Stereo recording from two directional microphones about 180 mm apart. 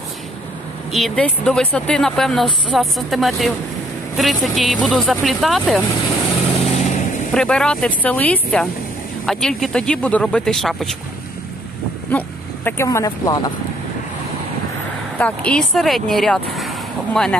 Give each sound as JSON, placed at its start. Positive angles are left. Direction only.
{"t": 0.9, "sound": "speech", "side_deg": 5}
{"t": 6.7, "sound": "vehicle", "side_deg": 40}
{"t": 7.3, "sound": "speech", "side_deg": 5}
{"t": 12.1, "sound": "speech", "side_deg": 10}
{"t": 15.1, "sound": "speech", "side_deg": 5}